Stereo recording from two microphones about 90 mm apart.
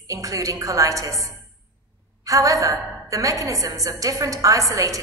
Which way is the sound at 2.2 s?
40° right (ahead or behind).